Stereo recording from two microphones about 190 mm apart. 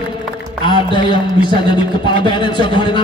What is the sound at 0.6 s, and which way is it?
A man's voice, 25° left (ahead or behind).